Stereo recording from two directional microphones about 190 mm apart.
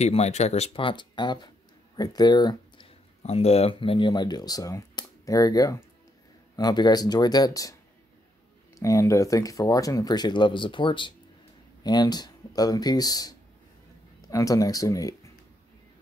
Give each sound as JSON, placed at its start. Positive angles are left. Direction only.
{"t": 0.0, "sound": "speech", "side_deg": 35}
{"t": 8.7, "sound": "speech", "side_deg": 15}